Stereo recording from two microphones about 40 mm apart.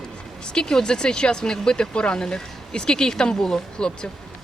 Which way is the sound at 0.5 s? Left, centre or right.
Centre.